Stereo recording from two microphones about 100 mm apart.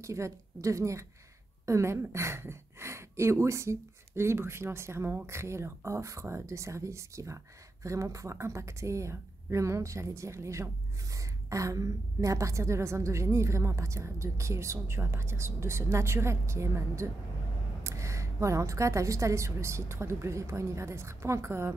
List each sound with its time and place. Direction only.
0.0 s a woman's voice: 30° right (ahead or behind)